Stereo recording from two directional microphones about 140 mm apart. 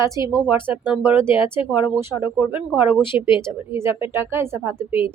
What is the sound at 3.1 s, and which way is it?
A woman's voice, 15° right (ahead or behind).